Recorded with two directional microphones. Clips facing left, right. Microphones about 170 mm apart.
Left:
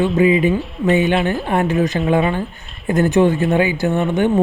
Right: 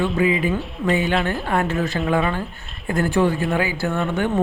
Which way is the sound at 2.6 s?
Centre (ahead or behind).